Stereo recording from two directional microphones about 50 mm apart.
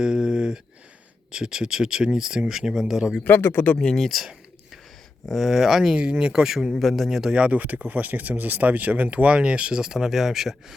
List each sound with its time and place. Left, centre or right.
0.0 s a sound: centre
1.3 s speech: centre
3.2 s speech: left
3.8 s speech: centre
5.3 s speech: centre
5.9 s speech: right
6.4 s speech: centre
7.5 s speech: right; by 10.8 s centre